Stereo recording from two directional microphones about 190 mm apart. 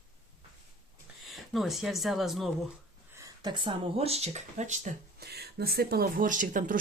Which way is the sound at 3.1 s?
20° right (ahead or behind).